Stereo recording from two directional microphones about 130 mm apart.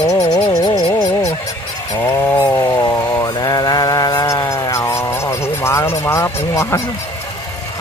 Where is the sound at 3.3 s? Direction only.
30° left (ahead or behind).